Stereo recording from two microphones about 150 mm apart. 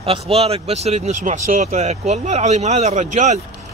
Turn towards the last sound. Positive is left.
turn(degrees=-50)  # may be behind; listen again after turning